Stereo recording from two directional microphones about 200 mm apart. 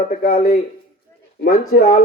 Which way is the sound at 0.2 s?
45° left (ahead or behind).